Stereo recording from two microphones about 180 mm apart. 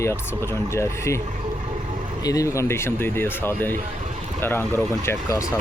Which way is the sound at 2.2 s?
20° left (ahead or behind).